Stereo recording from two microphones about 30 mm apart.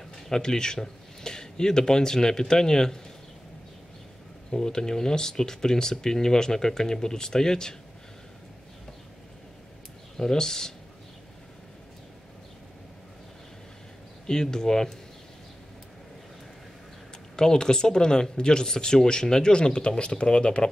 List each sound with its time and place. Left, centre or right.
0.1 s speech: left
4.5 s speech: left
10.1 s speech: centre
14.2 s speech: left
17.4 s speech: left